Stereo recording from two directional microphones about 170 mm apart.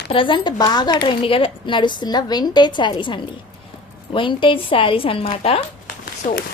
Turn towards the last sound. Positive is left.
turn(degrees=50)  # may be behind; listen again after turning